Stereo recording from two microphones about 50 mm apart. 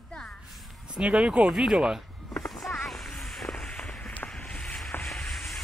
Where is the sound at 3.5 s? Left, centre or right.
Centre.